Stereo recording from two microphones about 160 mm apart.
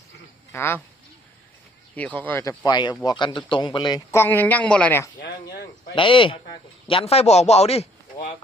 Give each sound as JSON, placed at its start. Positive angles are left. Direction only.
{"t": 0.5, "sound": "speech", "side_deg": 15}
{"t": 2.0, "sound": "a man's voice", "side_deg": 10}
{"t": 5.2, "sound": "speech", "side_deg": 75}
{"t": 5.9, "sound": "a man's voice", "side_deg": 30}